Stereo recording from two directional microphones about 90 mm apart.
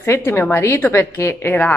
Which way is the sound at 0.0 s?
30° left (ahead or behind).